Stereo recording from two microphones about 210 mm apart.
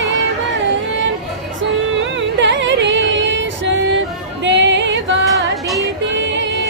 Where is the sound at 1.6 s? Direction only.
60° right (ahead or behind).